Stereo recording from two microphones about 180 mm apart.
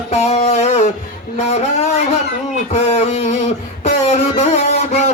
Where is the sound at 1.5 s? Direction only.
40° left (ahead or behind).